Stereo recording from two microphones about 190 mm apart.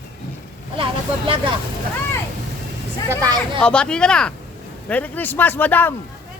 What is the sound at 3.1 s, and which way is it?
Speech, 20° right (ahead or behind).